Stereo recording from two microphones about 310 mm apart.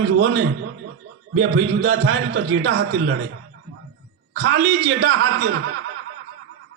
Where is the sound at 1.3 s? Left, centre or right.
Right.